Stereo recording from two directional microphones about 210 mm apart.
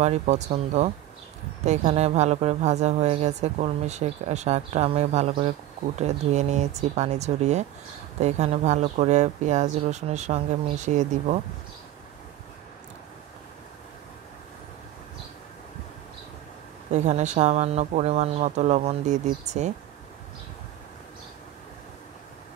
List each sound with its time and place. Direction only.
0.0 s speech: 30° right (ahead or behind)
16.9 s speech: 35° right (ahead or behind)